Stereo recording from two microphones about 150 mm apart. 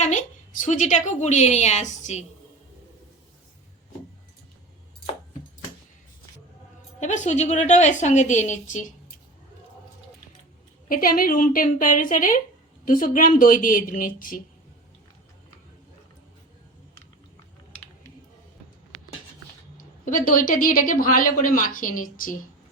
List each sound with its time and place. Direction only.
0.0 s a woman's voice: 55° left (ahead or behind)
7.0 s a woman's voice: 55° left (ahead or behind)
10.8 s a woman's voice: 70° left (ahead or behind)
20.1 s a woman's voice: 65° left (ahead or behind)